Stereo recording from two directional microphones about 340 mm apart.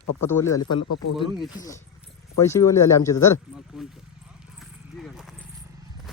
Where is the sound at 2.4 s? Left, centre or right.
Centre.